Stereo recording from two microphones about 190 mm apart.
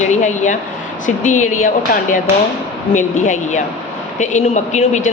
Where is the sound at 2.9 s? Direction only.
40° left (ahead or behind).